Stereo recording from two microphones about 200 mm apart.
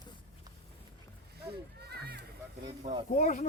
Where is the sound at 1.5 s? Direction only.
55° right (ahead or behind).